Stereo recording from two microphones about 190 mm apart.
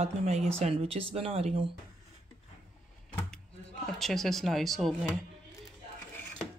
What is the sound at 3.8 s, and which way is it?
Speech, centre (ahead or behind).